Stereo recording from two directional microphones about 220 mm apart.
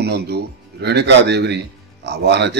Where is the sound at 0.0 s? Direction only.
50° right (ahead or behind).